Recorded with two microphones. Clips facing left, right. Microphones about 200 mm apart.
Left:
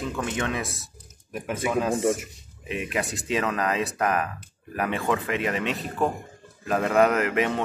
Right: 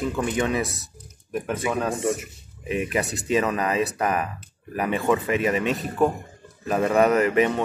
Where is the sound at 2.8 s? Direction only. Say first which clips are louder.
Right 3 dB; centre (ahead or behind).